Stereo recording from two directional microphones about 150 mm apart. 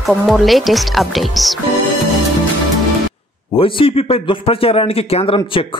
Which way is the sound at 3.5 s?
35° left (ahead or behind).